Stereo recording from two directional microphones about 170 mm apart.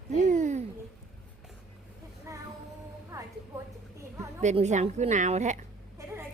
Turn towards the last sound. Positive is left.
turn(degrees=-45)  # may be behind; listen again after turning